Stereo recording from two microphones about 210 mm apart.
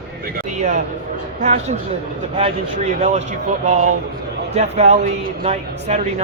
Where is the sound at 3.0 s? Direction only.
35° right (ahead or behind).